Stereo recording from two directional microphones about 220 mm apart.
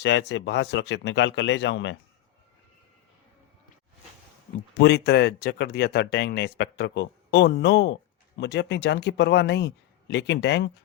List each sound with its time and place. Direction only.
0.0 s speech: 50° left (ahead or behind)
4.8 s speech: 50° left (ahead or behind)